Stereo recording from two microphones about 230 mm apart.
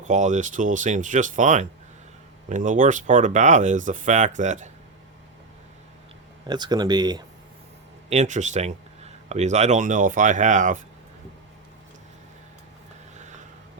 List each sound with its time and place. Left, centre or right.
0.1 s speech: right
6.5 s speech: centre
8.1 s speech: right
13.1 s a sound: right